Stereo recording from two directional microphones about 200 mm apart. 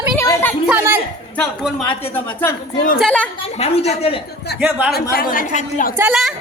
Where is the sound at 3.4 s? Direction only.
30° left (ahead or behind).